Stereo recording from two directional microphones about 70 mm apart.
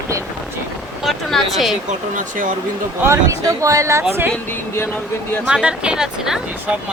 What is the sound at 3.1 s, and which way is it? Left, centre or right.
Speech, right.